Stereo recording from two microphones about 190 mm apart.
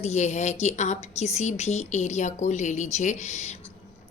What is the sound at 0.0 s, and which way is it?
A woman's voice, 35° left (ahead or behind).